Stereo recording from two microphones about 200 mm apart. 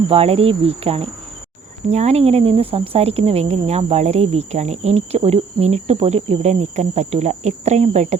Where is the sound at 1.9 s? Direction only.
35° right (ahead or behind).